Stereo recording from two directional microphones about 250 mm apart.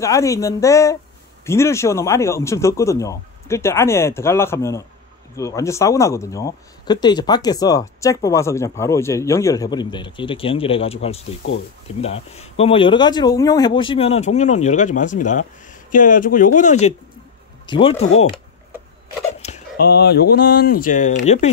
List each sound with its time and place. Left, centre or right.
0.0 s speech: centre
19.4 s a sound: left
19.8 s speech: left